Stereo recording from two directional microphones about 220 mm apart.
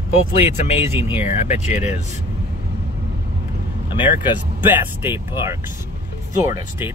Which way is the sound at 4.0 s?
10° right (ahead or behind).